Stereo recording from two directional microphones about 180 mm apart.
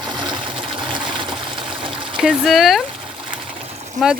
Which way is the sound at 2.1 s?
5° right (ahead or behind).